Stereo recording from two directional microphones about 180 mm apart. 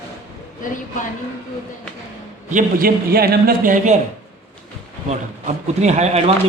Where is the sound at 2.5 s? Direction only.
55° right (ahead or behind).